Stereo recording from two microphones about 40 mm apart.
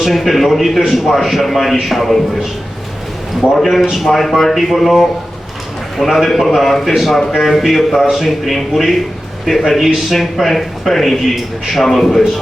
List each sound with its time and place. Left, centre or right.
0.0 s speech: centre
3.6 s a man's voice: centre